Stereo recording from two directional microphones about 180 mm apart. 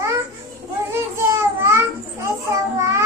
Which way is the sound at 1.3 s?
15° right (ahead or behind).